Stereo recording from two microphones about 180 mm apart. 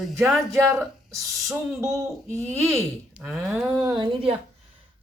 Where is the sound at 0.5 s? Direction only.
15° right (ahead or behind).